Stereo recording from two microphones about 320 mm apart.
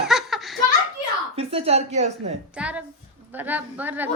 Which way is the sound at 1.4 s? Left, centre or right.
Centre.